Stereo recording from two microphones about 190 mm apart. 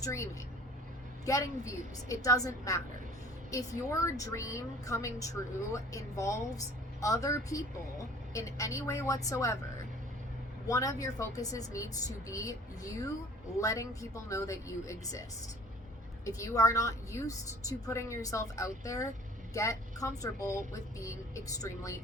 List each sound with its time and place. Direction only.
0.0 s a woman's voice: 15° left (ahead or behind)
10.7 s a woman's voice: 15° left (ahead or behind)
16.2 s a woman's voice: 15° left (ahead or behind)